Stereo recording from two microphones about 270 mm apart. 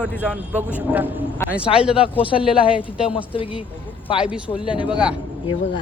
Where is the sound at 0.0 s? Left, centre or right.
Centre.